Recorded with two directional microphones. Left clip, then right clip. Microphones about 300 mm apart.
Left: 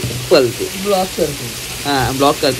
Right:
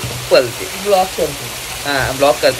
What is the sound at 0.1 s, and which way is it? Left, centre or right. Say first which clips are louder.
Speech: even; centre.